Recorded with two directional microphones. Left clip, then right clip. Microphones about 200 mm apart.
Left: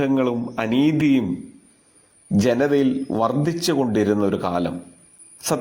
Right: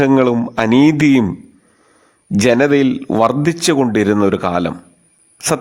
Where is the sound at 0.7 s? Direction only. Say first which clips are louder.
Right 8 dB; 90° right.